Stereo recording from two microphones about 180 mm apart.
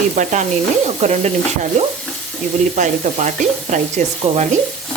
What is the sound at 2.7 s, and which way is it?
Sizzle, 45° right (ahead or behind).